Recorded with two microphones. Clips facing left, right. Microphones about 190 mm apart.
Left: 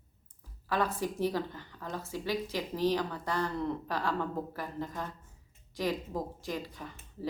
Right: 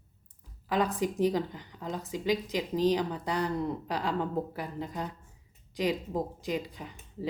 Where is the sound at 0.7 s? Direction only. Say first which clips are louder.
Right 3 dB; 15° right (ahead or behind).